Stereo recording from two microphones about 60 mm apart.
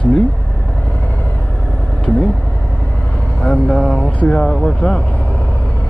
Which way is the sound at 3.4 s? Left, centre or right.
Centre.